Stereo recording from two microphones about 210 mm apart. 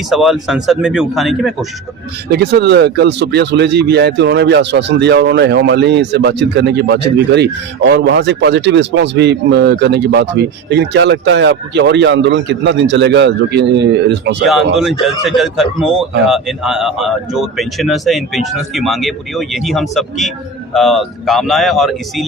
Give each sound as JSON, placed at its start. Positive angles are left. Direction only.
{"t": 0.1, "sound": "a man's voice", "side_deg": 0}
{"t": 2.3, "sound": "speech", "side_deg": -50}
{"t": 14.4, "sound": "a man's voice", "side_deg": 0}